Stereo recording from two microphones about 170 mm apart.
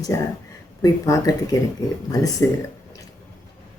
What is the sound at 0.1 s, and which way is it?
Speech, 20° left (ahead or behind).